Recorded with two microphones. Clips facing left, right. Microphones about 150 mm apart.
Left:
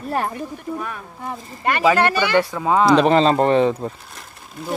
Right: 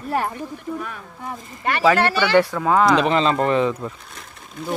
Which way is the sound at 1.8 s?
15° left (ahead or behind).